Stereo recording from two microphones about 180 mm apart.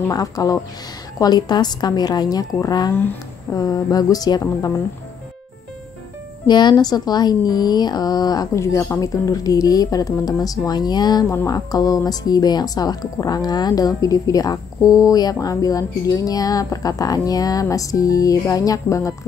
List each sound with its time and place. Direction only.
0.1 s speech: 20° left (ahead or behind)
6.4 s speech: 25° left (ahead or behind)